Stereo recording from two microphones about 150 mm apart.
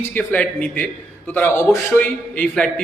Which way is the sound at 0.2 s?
10° left (ahead or behind).